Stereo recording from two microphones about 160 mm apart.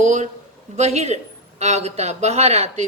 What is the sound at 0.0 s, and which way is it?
A woman's voice, 50° right (ahead or behind).